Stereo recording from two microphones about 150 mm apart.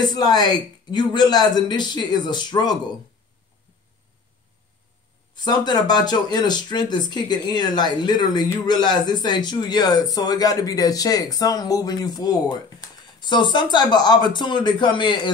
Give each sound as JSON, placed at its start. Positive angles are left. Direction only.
{"t": 0.0, "sound": "speech", "side_deg": 25}
{"t": 5.3, "sound": "speech", "side_deg": 30}